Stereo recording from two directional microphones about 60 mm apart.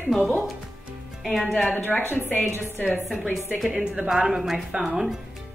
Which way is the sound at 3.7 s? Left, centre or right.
Centre.